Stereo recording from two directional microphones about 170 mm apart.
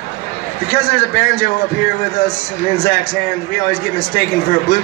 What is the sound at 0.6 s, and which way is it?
Speech, 60° left (ahead or behind).